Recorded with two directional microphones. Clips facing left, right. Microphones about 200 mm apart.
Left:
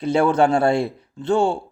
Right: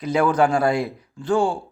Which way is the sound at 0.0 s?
30° left (ahead or behind).